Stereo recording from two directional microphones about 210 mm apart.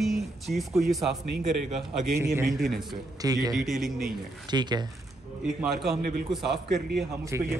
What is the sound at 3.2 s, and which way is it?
Speech, 15° right (ahead or behind).